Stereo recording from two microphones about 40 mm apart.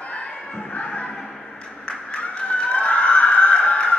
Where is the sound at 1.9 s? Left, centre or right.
Left.